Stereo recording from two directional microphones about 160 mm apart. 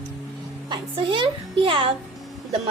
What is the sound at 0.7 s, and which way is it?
A woman's voice, 30° right (ahead or behind).